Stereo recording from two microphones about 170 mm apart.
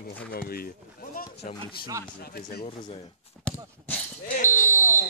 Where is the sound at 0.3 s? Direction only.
60° left (ahead or behind).